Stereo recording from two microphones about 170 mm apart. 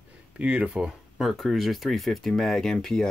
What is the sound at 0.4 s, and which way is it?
Speech, 5° right (ahead or behind).